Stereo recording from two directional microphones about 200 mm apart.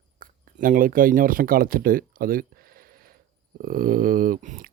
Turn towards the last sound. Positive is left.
turn(degrees=-40)  # may be behind; listen again after turning